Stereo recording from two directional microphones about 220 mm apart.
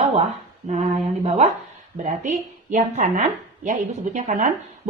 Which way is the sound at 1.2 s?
30° right (ahead or behind).